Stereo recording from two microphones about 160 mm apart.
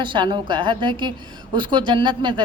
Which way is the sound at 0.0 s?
30° right (ahead or behind).